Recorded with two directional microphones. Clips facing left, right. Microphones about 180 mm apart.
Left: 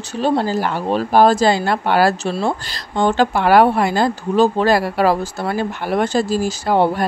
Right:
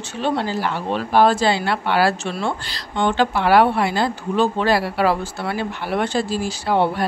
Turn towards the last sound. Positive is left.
turn(degrees=40)  # may be behind; listen again after turning